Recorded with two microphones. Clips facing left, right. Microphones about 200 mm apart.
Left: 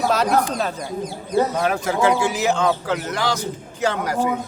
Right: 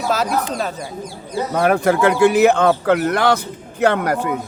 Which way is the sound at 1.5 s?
60° right (ahead or behind).